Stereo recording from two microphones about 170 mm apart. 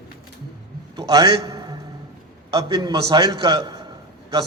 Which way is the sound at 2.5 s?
25° right (ahead or behind).